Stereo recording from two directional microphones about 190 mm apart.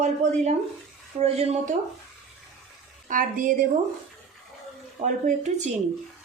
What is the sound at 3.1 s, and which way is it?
Speech, 45° right (ahead or behind).